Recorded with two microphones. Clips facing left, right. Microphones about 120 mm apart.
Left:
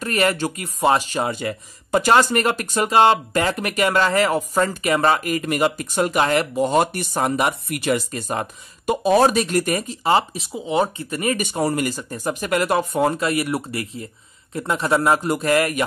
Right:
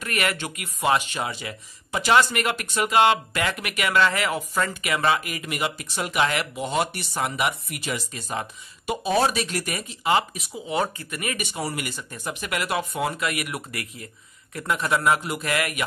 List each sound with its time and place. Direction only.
0.0 s speech: 35° left (ahead or behind)
7.8 s speech: 55° left (ahead or behind); by 11.4 s 30° left (ahead or behind)
11.4 s speech: 45° left (ahead or behind)